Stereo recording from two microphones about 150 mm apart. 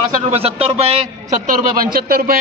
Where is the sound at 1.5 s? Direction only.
60° right (ahead or behind).